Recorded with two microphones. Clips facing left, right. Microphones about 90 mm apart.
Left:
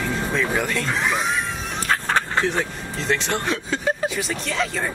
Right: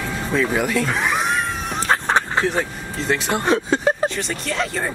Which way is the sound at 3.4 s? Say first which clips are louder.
Right 6 dB; 35° right (ahead or behind).